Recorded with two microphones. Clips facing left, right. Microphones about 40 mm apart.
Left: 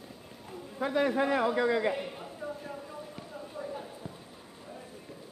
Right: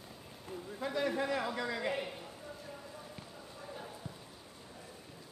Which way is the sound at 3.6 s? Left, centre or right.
Centre.